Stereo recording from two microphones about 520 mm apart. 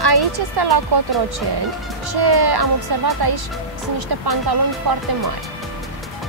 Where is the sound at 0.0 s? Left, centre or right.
Right.